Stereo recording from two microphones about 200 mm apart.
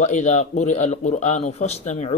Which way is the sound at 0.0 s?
35° left (ahead or behind).